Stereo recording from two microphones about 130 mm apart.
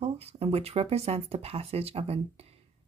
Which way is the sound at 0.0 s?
55° right (ahead or behind).